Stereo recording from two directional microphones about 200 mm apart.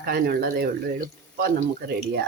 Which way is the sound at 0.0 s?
50° right (ahead or behind).